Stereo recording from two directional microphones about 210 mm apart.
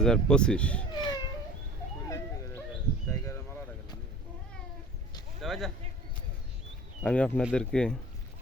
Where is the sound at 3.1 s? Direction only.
15° left (ahead or behind).